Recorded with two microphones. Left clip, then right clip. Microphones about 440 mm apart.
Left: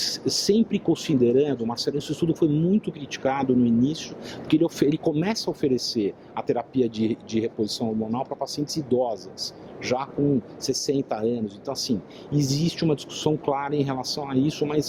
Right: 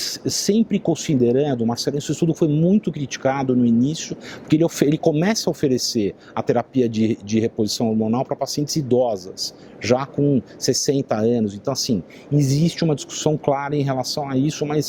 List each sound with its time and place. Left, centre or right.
0.0 s speech: right